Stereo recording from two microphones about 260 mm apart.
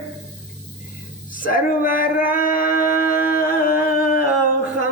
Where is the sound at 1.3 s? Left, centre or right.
Left.